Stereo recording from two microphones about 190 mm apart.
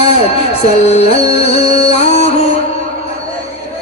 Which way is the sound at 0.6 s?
35° left (ahead or behind).